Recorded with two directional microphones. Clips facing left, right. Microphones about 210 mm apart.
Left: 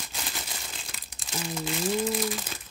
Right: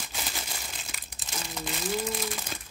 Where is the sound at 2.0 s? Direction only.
Centre (ahead or behind).